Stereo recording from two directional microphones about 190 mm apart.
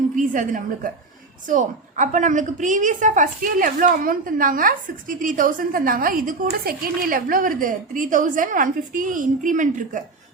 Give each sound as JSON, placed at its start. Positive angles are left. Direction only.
{"t": 0.2, "sound": "a woman's voice", "side_deg": -45}